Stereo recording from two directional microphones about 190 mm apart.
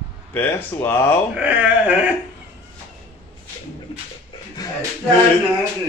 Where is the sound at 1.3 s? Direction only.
5° right (ahead or behind).